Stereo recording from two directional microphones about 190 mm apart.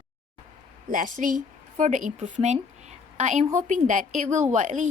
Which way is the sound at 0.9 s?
45° right (ahead or behind).